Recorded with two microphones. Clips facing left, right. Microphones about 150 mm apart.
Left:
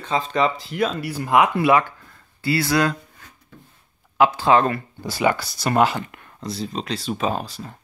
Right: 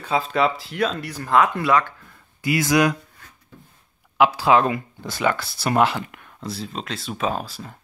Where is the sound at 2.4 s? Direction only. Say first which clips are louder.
Right 1 dB; 15° right (ahead or behind).